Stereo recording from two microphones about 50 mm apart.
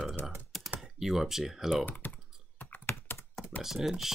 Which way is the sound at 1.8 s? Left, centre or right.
Left.